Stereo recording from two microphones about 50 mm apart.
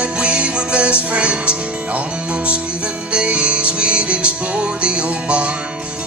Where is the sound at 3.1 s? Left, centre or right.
Right.